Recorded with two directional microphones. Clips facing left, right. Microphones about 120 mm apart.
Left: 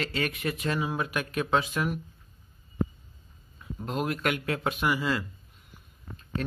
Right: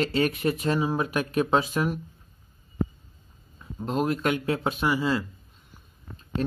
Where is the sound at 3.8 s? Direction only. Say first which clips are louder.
Right 4 dB; 35° right (ahead or behind).